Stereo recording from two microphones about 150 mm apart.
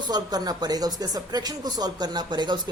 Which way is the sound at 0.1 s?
25° right (ahead or behind).